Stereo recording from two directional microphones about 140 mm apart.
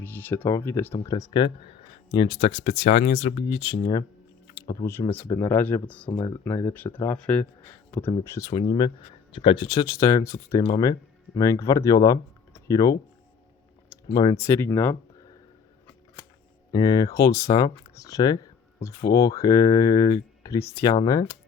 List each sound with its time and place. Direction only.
0.0 s speech: 15° left (ahead or behind)
0.9 s speech: 30° left (ahead or behind); by 6.1 s 10° left (ahead or behind)
6.1 s speech: 20° left (ahead or behind)
13.9 s a sound: 30° left (ahead or behind)
14.4 s speech: 20° left (ahead or behind)
16.7 s speech: 25° left (ahead or behind)